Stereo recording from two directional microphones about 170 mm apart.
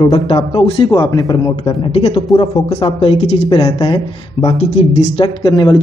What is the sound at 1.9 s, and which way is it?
A man's voice, 35° left (ahead or behind).